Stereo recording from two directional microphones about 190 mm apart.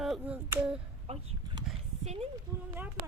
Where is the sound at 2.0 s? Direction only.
35° right (ahead or behind).